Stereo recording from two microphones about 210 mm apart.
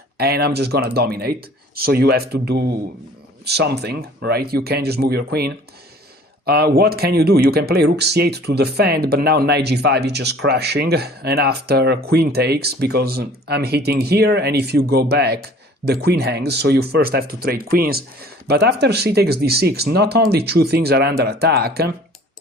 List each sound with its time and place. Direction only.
0.2 s speech: 50° right (ahead or behind)